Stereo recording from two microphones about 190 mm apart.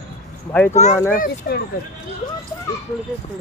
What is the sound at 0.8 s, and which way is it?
Speech, 35° left (ahead or behind).